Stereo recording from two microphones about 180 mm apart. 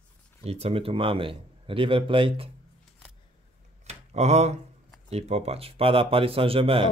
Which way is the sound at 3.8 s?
40° right (ahead or behind).